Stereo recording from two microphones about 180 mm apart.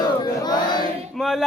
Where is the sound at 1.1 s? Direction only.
Centre (ahead or behind).